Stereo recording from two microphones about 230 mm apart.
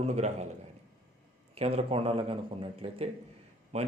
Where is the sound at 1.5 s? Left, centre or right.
Right.